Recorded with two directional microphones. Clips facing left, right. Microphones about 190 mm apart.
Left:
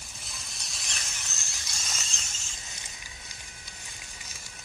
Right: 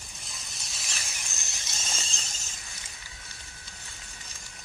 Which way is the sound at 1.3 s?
20° right (ahead or behind).